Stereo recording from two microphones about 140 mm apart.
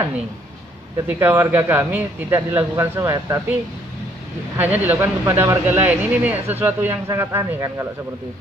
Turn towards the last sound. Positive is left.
turn(degrees=-20)  # may be behind; listen again after turning